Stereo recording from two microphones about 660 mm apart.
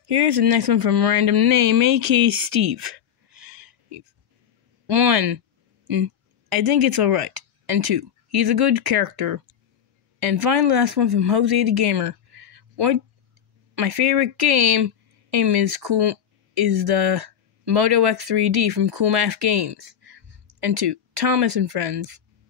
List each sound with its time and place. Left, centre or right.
0.0 s speech: right
3.3 s a sound: right
4.8 s speech: right
10.4 s speech: right